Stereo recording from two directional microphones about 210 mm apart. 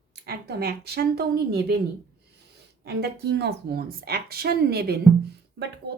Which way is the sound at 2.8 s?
50° right (ahead or behind).